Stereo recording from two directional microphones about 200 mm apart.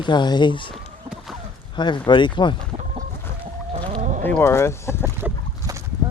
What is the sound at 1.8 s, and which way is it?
Speech, 20° left (ahead or behind).